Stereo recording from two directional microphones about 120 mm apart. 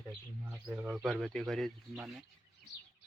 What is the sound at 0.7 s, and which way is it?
Speech, 15° right (ahead or behind).